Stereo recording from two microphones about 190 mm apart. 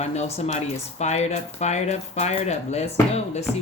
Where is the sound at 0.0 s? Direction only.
35° left (ahead or behind).